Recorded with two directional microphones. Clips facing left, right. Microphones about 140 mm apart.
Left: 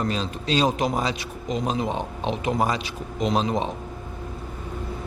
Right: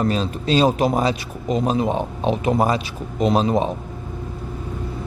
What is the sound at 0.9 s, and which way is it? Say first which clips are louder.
Speech: right 6 dB; 45° right (ahead or behind).